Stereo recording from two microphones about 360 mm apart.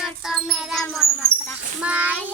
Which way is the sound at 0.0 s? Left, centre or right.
Centre.